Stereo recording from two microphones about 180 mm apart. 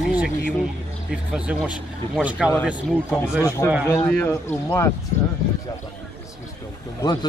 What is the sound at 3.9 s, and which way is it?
A man's voice, 10° left (ahead or behind).